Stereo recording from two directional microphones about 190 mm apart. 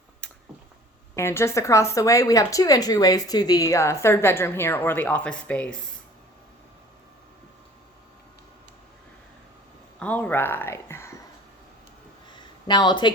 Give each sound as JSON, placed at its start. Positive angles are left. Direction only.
{"t": 0.2, "sound": "a sound", "side_deg": 5}
{"t": 1.1, "sound": "a woman's voice", "side_deg": 15}
{"t": 10.0, "sound": "speech", "side_deg": 5}
{"t": 12.6, "sound": "speech", "side_deg": 25}